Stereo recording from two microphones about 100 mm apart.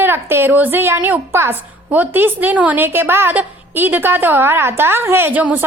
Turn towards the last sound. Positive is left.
turn(degrees=-15)  # may be behind; listen again after turning